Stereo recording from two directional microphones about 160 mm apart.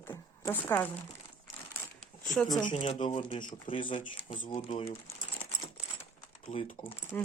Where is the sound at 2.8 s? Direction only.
45° left (ahead or behind).